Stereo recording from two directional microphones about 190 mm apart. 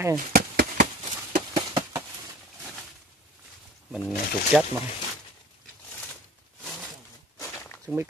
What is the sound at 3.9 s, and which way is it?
Speech, 5° right (ahead or behind).